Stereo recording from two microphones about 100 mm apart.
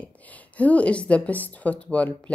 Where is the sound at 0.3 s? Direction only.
15° left (ahead or behind).